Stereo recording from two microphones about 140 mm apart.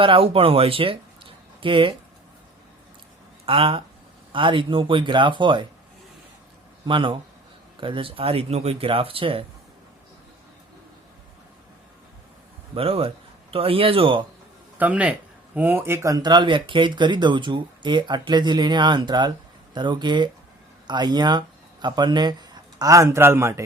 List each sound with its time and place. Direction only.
0.0 s speech: 40° right (ahead or behind)
3.4 s speech: 40° right (ahead or behind)
6.8 s speech: 35° right (ahead or behind)
12.7 s speech: 45° right (ahead or behind)
14.8 s a man's voice: 10° right (ahead or behind)